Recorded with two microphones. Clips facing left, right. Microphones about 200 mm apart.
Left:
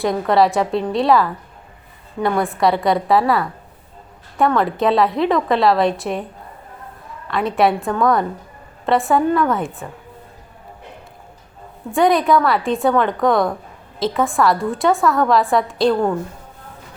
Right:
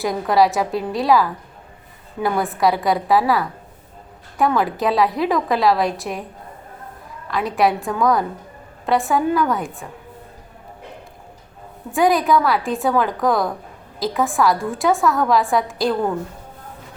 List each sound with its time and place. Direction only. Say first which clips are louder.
0.0 s a woman's voice: left 1 dB; centre (ahead or behind)
7.3 s a woman's voice: left 2 dB; centre (ahead or behind)
11.9 s a woman's voice: left 2 dB; centre (ahead or behind)